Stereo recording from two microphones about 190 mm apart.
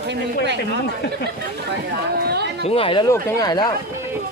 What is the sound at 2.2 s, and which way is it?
Speech, 60° right (ahead or behind).